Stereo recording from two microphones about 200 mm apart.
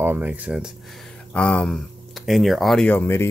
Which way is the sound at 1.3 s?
5° left (ahead or behind).